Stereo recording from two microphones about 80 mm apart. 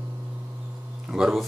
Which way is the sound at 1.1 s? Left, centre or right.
Centre.